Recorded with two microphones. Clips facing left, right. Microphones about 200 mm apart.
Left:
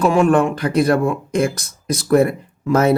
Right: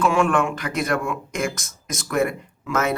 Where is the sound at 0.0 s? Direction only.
35° left (ahead or behind).